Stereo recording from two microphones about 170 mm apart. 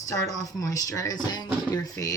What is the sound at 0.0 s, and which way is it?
Speech, 20° left (ahead or behind).